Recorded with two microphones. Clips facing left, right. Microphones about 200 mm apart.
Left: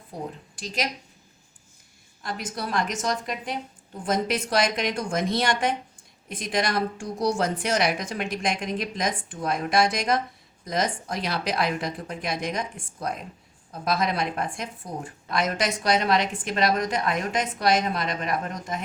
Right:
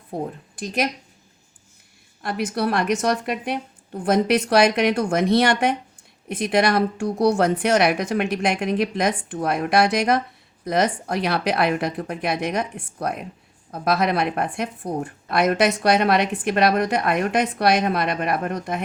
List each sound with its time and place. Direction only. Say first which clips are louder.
0.1 s speech: right 6 dB; 55° right (ahead or behind)
2.2 s speech: right 9 dB; 65° right (ahead or behind)